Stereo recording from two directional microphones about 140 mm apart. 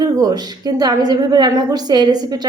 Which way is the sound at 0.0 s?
25° right (ahead or behind).